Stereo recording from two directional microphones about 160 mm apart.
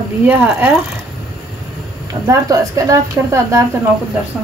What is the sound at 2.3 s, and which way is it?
Speech, 20° right (ahead or behind).